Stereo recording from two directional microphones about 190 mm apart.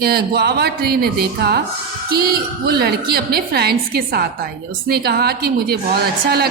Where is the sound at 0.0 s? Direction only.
55° right (ahead or behind).